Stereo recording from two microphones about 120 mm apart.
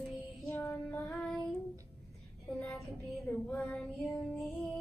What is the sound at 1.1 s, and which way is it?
Child singing, 5° left (ahead or behind).